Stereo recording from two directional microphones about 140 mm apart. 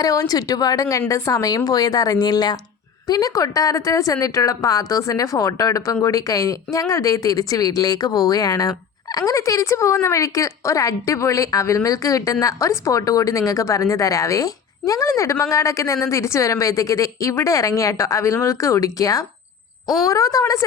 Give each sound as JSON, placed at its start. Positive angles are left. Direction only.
{"t": 0.0, "sound": "speech", "side_deg": 25}